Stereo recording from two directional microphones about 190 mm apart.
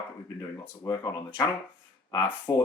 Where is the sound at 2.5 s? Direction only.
20° left (ahead or behind).